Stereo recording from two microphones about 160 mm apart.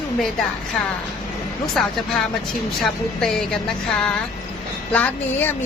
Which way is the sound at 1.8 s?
5° left (ahead or behind).